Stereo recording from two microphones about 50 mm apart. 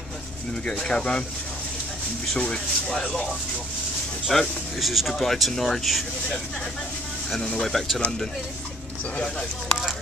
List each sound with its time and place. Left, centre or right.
0.7 s speech: centre
2.3 s speech: left
4.3 s speech: centre
7.6 s speech: centre
9.4 s speech: centre